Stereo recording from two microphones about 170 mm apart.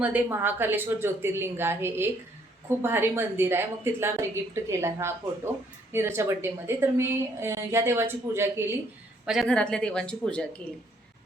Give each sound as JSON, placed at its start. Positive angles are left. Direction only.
{"t": 0.0, "sound": "a woman's voice", "side_deg": -10}
{"t": 9.2, "sound": "speech", "side_deg": 0}